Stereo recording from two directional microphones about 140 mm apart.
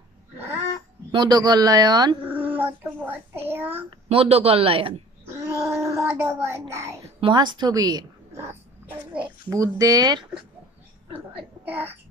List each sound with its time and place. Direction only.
1.1 s speech: 30° right (ahead or behind)
2.2 s a child's voice: 15° right (ahead or behind)
4.1 s a man's voice: 45° right (ahead or behind)
5.7 s speech: 20° right (ahead or behind)
7.2 s a woman's voice: 35° right (ahead or behind)
9.5 s speech: 25° right (ahead or behind)
11.3 s a woman's voice: 15° right (ahead or behind)